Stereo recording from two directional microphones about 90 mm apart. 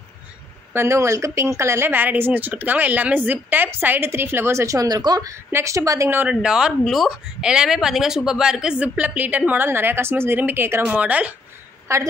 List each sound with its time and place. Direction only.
0.7 s speech: 30° right (ahead or behind); by 5.3 s 50° right (ahead or behind)
5.3 s a woman's voice: 35° right (ahead or behind)
6.1 s speech: 10° right (ahead or behind)
11.9 s a woman's voice: 35° right (ahead or behind)